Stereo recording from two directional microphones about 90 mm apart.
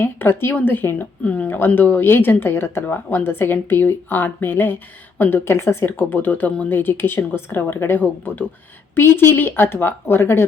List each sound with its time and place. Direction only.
0.0 s speech: 25° left (ahead or behind)